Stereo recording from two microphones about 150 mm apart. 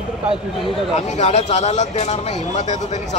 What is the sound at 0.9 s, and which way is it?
Speech, 50° left (ahead or behind).